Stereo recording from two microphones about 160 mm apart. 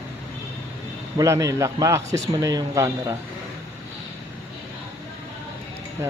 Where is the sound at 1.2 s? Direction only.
20° right (ahead or behind).